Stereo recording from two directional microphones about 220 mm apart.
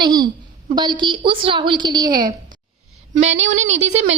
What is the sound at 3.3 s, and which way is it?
Speech, 60° right (ahead or behind).